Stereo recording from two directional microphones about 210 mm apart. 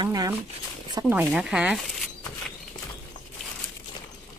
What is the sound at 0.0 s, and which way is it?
Speech, 15° right (ahead or behind).